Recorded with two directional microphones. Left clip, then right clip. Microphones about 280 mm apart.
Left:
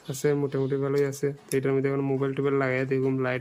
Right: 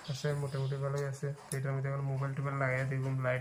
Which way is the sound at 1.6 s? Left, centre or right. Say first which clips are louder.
Left 13 dB; left.